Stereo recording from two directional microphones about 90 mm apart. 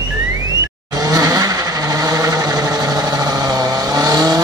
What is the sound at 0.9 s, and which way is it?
Vehicle, 40° right (ahead or behind).